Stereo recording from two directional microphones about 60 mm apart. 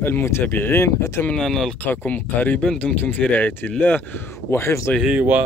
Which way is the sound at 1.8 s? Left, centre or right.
Left.